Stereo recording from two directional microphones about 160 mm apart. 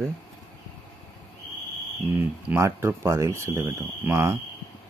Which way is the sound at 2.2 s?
15° right (ahead or behind).